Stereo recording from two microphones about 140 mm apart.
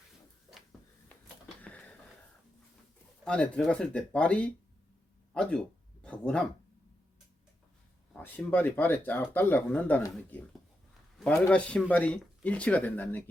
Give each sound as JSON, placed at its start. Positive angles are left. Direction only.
{"t": 1.6, "sound": "a sound", "side_deg": 10}
{"t": 3.2, "sound": "speech", "side_deg": 10}
{"t": 8.1, "sound": "speech", "side_deg": 10}
{"t": 11.3, "sound": "speech", "side_deg": 10}